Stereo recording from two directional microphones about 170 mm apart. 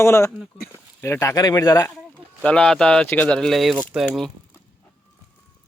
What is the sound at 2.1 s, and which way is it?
Speech, 5° left (ahead or behind).